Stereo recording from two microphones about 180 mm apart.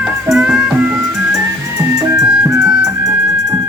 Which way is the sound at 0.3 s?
Centre (ahead or behind).